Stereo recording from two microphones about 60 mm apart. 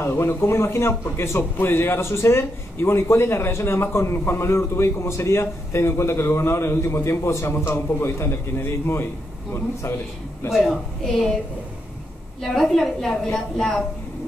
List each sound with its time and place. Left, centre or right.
0.0 s a man's voice: left
12.4 s a woman's voice: centre